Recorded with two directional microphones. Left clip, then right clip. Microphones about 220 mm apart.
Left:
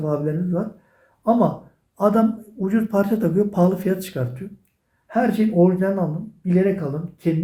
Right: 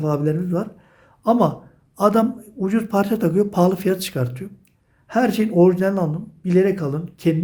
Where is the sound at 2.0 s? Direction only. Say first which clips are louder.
Right 1 dB; 30° right (ahead or behind).